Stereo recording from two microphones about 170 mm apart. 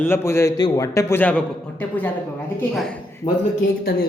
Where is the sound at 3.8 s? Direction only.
60° left (ahead or behind).